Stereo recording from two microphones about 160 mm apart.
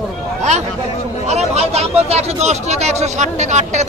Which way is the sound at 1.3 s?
40° right (ahead or behind).